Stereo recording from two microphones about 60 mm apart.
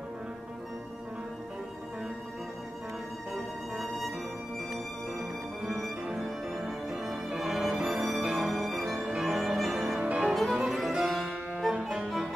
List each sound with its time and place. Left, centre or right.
3.7 s music: centre
6.1 s music: centre
8.5 s music: centre
9.9 s music: centre